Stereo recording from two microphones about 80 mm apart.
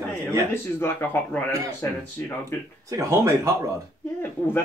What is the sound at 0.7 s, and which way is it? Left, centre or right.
Speech, left.